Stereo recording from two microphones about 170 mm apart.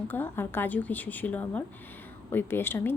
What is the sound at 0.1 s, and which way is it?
A woman's voice, 10° left (ahead or behind).